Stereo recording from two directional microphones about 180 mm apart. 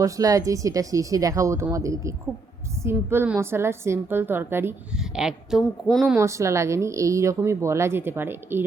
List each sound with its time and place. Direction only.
0.0 s a woman's voice: 20° right (ahead or behind); by 6.1 s centre (ahead or behind)
6.1 s a woman's voice: 15° right (ahead or behind)